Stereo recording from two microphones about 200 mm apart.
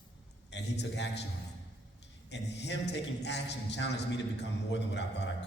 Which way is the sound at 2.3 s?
60° left (ahead or behind).